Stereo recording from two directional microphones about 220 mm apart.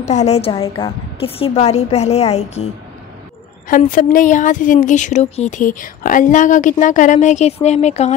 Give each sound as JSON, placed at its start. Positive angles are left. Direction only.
{"t": 0.0, "sound": "a woman's voice", "side_deg": 30}